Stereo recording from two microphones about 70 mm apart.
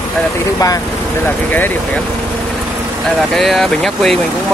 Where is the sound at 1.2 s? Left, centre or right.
Left.